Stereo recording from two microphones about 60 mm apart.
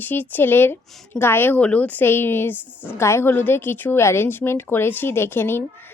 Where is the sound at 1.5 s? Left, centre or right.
Left.